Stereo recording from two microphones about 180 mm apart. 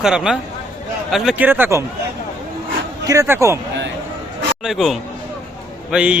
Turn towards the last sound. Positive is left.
turn(degrees=-5)  # may be behind; listen again after turning